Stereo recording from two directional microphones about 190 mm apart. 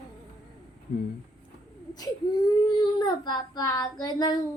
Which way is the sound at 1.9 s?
20° left (ahead or behind).